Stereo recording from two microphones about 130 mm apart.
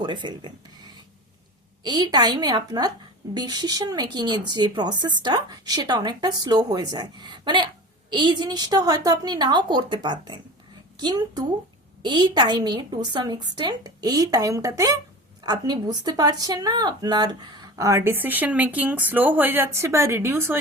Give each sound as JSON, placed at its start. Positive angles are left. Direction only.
{"t": 0.0, "sound": "speech", "side_deg": -35}